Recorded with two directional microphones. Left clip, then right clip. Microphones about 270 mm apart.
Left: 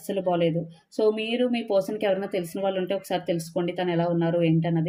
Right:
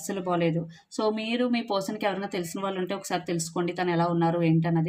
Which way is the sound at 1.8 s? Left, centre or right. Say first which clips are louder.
Left 4 dB; centre.